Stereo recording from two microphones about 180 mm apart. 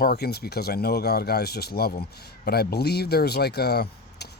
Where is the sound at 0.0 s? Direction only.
60° left (ahead or behind).